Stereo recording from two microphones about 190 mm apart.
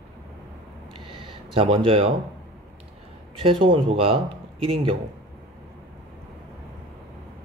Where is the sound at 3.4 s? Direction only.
25° right (ahead or behind).